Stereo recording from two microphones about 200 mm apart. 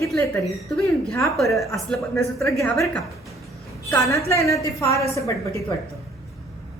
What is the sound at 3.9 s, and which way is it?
A woman's voice, 15° left (ahead or behind).